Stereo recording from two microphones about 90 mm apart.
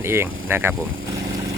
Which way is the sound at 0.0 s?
25° right (ahead or behind).